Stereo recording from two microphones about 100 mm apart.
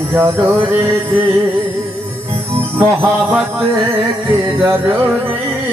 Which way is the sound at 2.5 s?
25° right (ahead or behind).